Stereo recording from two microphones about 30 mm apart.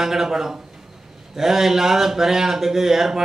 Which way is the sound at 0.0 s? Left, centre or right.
Centre.